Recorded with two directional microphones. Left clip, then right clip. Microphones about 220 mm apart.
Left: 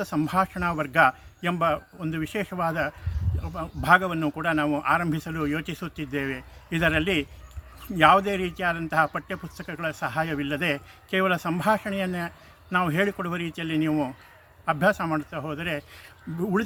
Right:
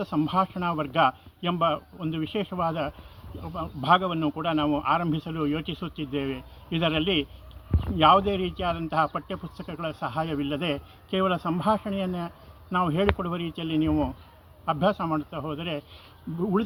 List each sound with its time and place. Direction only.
0.0 s speech: 25° left (ahead or behind)
10.7 s speech: 50° left (ahead or behind)
12.9 s speech: 15° left (ahead or behind)